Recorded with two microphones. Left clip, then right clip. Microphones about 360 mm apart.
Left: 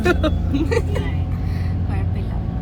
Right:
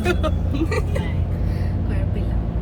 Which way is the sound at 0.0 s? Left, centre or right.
Centre.